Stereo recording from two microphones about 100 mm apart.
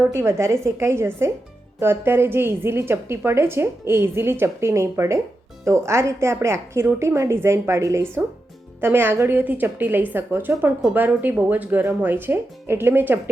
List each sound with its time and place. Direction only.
0.1 s a woman's voice: 30° right (ahead or behind)